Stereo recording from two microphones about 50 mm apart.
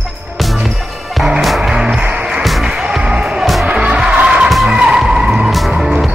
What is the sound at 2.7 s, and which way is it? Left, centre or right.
Music, centre.